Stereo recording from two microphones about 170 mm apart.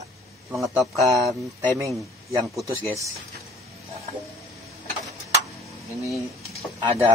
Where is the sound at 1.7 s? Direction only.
20° right (ahead or behind).